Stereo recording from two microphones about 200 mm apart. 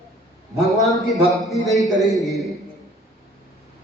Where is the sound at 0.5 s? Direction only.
Centre (ahead or behind).